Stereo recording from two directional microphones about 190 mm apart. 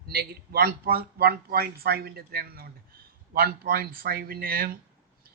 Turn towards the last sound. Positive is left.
turn(degrees=-50)  # may be behind; listen again after turning